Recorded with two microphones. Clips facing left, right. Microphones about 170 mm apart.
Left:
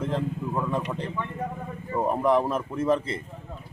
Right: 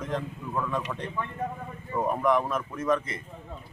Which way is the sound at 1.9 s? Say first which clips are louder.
Left 2 dB; 25° left (ahead or behind).